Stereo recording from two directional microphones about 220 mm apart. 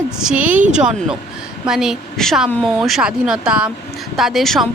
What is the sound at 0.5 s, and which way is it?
Speech, 35° right (ahead or behind).